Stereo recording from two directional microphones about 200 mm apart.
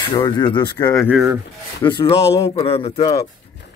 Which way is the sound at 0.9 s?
10° left (ahead or behind).